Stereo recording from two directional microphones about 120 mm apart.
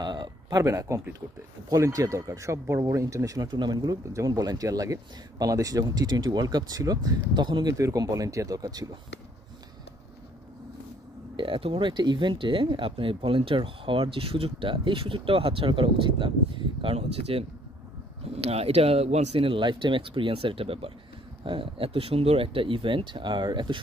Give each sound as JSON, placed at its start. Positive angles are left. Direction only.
{"t": 0.0, "sound": "speech", "side_deg": -35}
{"t": 7.7, "sound": "speech", "side_deg": -30}
{"t": 11.3, "sound": "speech", "side_deg": -45}